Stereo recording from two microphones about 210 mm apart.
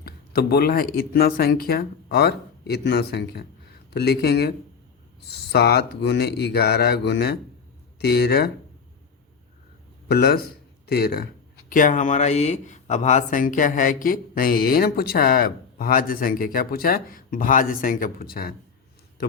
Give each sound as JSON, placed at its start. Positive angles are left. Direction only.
{"t": 0.0, "sound": "speech", "side_deg": 50}
{"t": 10.1, "sound": "speech", "side_deg": 45}